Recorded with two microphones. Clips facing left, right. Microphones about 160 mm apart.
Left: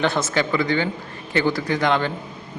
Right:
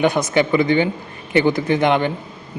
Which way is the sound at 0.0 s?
15° right (ahead or behind).